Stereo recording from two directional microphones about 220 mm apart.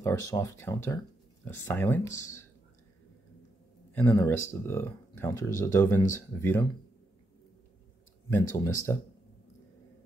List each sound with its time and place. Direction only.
0.0 s speech: 15° left (ahead or behind)
3.9 s speech: 10° left (ahead or behind)
8.3 s speech: 10° left (ahead or behind)